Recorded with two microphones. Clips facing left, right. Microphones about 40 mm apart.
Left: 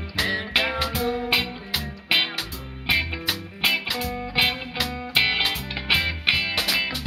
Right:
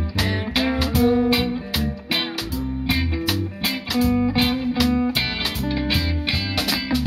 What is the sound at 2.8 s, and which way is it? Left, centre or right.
Music, left.